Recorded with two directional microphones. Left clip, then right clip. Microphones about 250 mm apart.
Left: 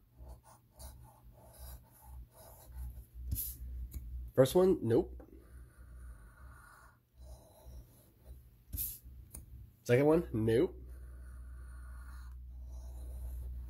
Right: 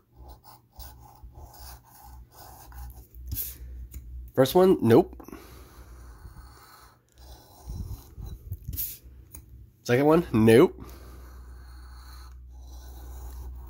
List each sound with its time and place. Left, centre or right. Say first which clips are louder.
4.4 s speech: right 7 dB; centre
4.6 s speech: right 11 dB; right
9.8 s speech: right 7 dB; centre; by 10.7 s right